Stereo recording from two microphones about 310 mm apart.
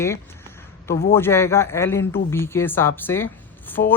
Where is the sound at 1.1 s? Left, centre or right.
Centre.